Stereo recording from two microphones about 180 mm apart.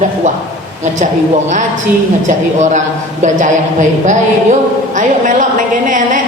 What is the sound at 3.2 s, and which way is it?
A man's voice, 45° right (ahead or behind).